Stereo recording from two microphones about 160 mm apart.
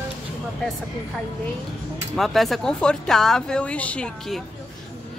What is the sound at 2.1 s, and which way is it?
Speech, centre (ahead or behind).